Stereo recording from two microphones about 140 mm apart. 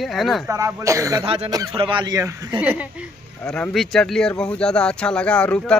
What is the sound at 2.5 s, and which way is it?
Speech, 10° right (ahead or behind).